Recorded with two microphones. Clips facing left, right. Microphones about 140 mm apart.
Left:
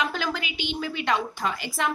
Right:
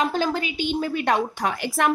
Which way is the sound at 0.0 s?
40° right (ahead or behind).